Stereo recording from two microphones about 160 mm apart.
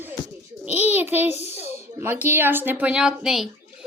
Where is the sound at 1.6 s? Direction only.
40° left (ahead or behind).